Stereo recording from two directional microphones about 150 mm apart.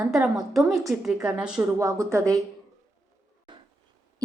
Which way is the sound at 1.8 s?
20° right (ahead or behind).